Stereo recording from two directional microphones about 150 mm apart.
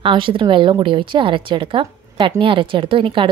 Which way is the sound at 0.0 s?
35° right (ahead or behind).